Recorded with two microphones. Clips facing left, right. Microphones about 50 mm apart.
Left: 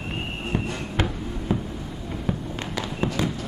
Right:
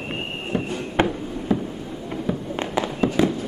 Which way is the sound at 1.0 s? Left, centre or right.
Right.